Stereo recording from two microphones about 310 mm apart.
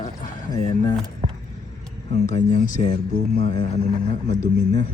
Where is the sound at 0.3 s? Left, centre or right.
Left.